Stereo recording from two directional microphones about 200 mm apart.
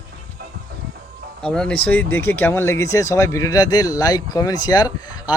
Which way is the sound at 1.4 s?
5° left (ahead or behind).